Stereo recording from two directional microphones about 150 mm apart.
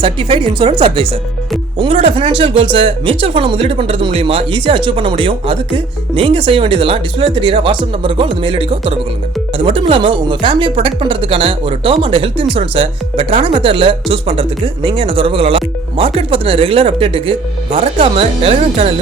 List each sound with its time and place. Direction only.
0.0 s speech: 35° right (ahead or behind)